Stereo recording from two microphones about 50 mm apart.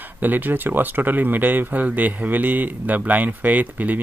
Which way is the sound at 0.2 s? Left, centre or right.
Right.